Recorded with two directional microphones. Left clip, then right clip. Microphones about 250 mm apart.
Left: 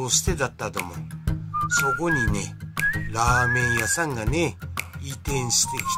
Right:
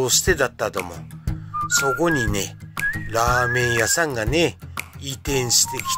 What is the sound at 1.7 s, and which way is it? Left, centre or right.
Speech, centre.